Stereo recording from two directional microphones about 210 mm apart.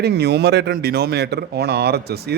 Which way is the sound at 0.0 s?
50° right (ahead or behind).